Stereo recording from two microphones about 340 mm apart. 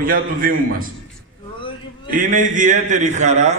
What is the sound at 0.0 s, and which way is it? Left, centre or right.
Speech, right.